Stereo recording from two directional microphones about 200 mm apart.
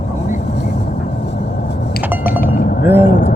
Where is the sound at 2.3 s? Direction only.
45° left (ahead or behind).